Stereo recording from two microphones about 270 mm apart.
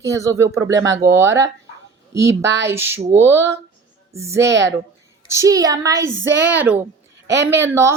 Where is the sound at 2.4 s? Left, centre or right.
Right.